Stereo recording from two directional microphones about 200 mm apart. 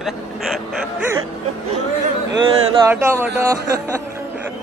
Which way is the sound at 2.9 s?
15° right (ahead or behind).